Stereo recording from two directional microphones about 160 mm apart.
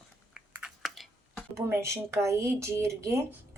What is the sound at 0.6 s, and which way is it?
Chewing, centre (ahead or behind).